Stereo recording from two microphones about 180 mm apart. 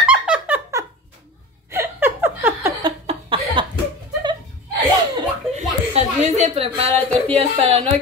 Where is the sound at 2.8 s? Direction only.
30° right (ahead or behind).